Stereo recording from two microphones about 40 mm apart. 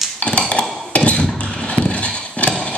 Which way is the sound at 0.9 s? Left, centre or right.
Left.